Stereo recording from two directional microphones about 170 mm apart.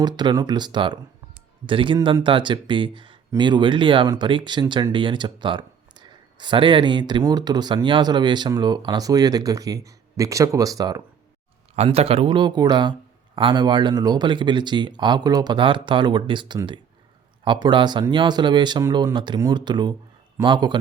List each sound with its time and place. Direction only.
0.0 s speech: 25° right (ahead or behind)
11.8 s speech: 35° right (ahead or behind)